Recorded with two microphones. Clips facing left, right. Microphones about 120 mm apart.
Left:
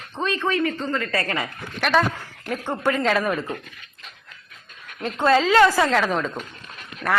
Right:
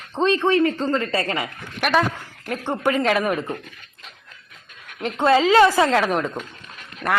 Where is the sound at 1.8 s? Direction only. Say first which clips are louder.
Even; 10° right (ahead or behind).